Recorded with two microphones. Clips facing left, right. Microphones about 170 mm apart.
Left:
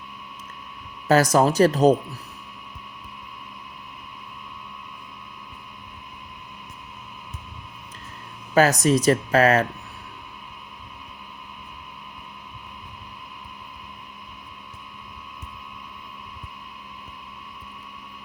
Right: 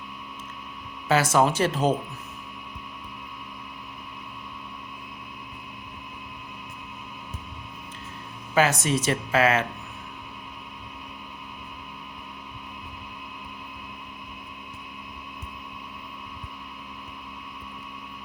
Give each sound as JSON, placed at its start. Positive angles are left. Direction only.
{"t": 1.0, "sound": "speech", "side_deg": 40}
{"t": 8.5, "sound": "speech", "side_deg": 40}